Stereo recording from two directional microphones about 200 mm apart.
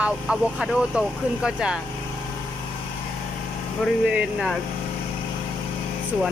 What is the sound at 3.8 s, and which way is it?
Speech, centre (ahead or behind).